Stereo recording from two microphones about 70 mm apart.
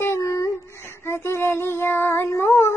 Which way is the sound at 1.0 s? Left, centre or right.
Left.